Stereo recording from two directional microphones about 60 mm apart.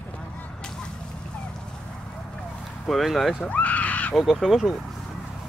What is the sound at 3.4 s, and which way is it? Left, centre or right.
Speech, left.